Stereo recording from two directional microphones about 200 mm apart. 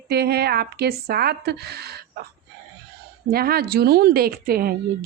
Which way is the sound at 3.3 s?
50° right (ahead or behind).